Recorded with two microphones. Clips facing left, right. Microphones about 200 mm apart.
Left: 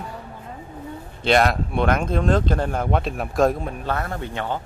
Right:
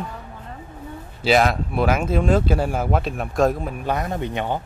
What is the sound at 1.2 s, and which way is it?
Speech, centre (ahead or behind).